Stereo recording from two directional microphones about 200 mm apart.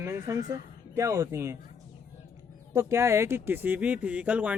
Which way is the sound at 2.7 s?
15° right (ahead or behind).